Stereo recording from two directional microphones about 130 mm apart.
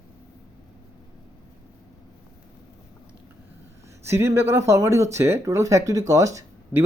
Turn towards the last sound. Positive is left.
turn(degrees=-20)  # may be behind; listen again after turning